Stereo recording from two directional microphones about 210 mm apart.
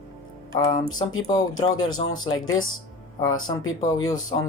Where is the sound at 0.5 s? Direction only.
20° left (ahead or behind).